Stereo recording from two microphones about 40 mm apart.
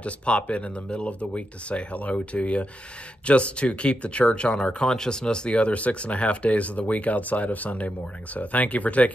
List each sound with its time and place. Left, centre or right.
0.0 s speech: left